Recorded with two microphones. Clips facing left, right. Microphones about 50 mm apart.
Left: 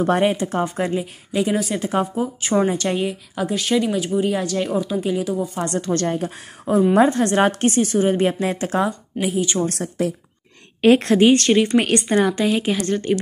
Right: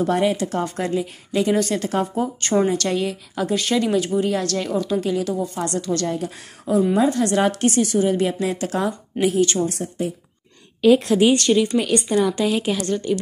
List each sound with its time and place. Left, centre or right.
0.0 s a woman's voice: left; by 3.4 s centre
3.4 s speech: centre
5.7 s a woman's voice: left
9.2 s speech: centre
10.8 s a woman's voice: left
11.1 s a woman's voice: left
12.2 s a woman's voice: left
12.4 s speech: centre
12.8 s a woman's voice: left